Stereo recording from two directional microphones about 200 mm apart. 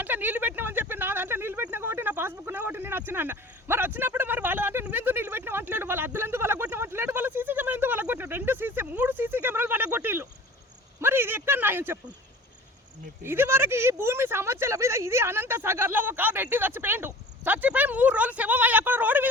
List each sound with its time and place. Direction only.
0.0 s a sound: 10° right (ahead or behind)
11.0 s speech: 10° right (ahead or behind)
13.2 s speech: 10° right (ahead or behind)